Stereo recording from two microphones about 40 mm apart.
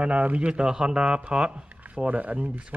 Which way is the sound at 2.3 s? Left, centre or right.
Right.